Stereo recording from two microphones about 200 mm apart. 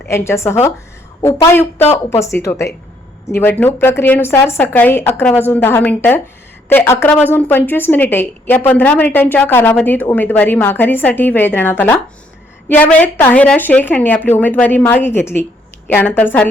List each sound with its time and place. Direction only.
0.0 s a woman's voice: 15° left (ahead or behind)